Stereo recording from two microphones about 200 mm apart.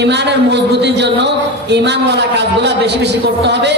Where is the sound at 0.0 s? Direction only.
60° right (ahead or behind).